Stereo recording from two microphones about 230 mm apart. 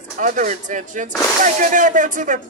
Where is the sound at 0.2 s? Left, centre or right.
Right.